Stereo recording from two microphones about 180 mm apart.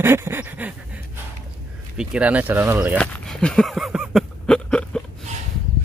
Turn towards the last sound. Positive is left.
turn(degrees=5)  # may be behind; listen again after turning